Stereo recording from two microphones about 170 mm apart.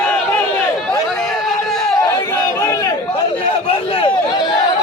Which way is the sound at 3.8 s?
35° left (ahead or behind).